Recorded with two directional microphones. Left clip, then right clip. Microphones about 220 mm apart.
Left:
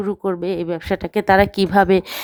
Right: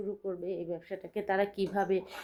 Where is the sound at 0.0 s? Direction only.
50° left (ahead or behind).